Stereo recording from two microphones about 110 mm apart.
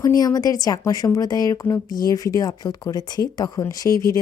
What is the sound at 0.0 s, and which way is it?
A woman's voice, 35° left (ahead or behind).